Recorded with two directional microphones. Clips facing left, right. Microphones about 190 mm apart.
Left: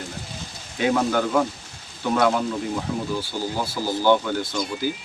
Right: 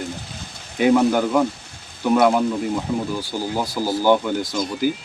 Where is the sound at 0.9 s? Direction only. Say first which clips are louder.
Right 5 dB; 10° right (ahead or behind).